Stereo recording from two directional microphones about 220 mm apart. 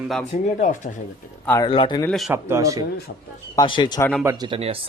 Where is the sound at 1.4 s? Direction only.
10° left (ahead or behind).